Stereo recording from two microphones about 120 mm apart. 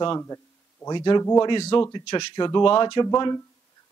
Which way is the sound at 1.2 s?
30° left (ahead or behind).